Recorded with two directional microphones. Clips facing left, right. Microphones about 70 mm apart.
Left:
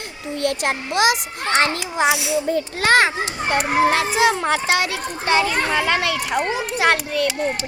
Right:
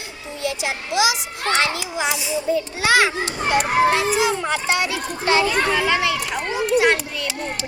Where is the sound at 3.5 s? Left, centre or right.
Left.